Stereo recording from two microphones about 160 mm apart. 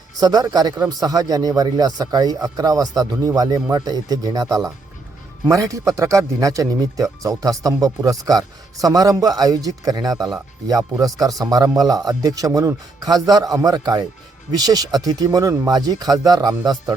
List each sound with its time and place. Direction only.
0.2 s speech: 25° right (ahead or behind)